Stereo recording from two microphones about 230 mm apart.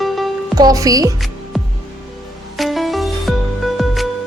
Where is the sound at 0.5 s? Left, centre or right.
Centre.